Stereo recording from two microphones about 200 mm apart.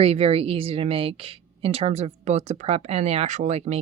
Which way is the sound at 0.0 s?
30° right (ahead or behind).